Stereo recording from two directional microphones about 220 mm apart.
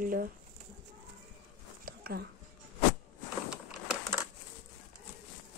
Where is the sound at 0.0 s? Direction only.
40° right (ahead or behind).